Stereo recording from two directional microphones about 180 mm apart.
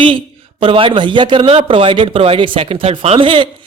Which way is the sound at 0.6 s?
30° right (ahead or behind).